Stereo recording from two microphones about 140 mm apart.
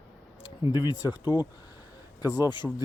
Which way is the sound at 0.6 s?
30° left (ahead or behind).